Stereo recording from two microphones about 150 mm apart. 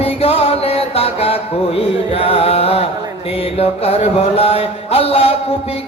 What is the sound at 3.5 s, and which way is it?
Mantra, 45° left (ahead or behind).